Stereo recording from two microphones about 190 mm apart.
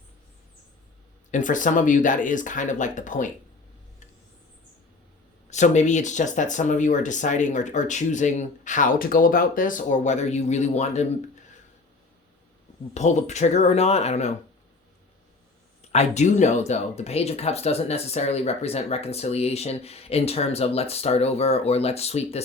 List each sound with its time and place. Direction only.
1.3 s speech: 45° left (ahead or behind)
5.5 s speech: 40° left (ahead or behind)
12.9 s speech: 40° left (ahead or behind)
15.9 s speech: 35° left (ahead or behind)